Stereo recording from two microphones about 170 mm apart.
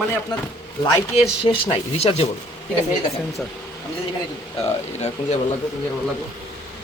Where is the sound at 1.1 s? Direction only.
35° left (ahead or behind).